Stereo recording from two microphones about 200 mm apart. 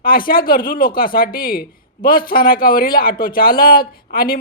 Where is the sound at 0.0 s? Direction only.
45° left (ahead or behind).